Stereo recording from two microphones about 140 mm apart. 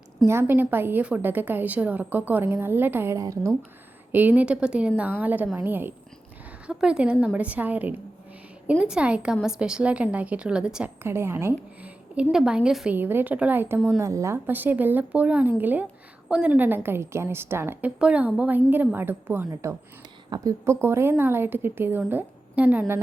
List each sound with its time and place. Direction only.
0.3 s a woman's voice: 15° right (ahead or behind)
11.0 s a woman's voice: 20° right (ahead or behind)